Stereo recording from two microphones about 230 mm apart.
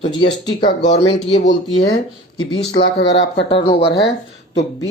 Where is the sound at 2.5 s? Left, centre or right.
Left.